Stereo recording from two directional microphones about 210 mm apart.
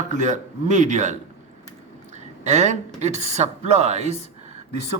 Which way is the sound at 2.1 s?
35° right (ahead or behind).